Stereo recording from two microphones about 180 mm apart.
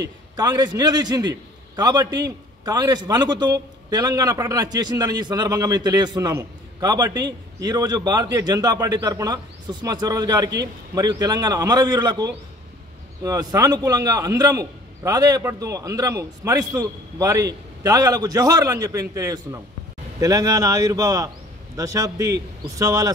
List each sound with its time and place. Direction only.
0.4 s a man's voice: 20° right (ahead or behind)